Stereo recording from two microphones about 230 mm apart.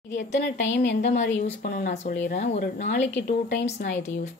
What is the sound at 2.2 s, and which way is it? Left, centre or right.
Speech, left.